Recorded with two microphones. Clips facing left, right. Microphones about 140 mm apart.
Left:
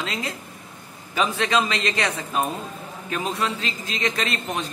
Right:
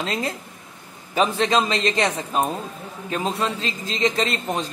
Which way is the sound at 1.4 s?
30° right (ahead or behind).